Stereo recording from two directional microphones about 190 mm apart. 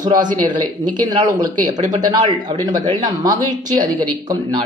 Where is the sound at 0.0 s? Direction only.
20° right (ahead or behind).